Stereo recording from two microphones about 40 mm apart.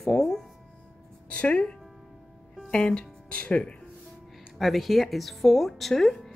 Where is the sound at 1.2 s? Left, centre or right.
Left.